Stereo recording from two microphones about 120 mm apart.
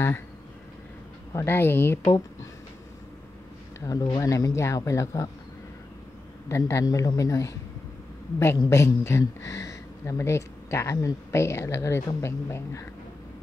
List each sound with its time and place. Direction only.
1.3 s speech: 20° left (ahead or behind)
3.8 s speech: 30° left (ahead or behind)
6.5 s speech: 25° left (ahead or behind)
8.5 s speech: 25° left (ahead or behind)